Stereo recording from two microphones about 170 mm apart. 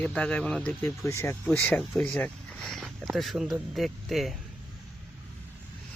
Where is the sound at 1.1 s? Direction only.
15° left (ahead or behind).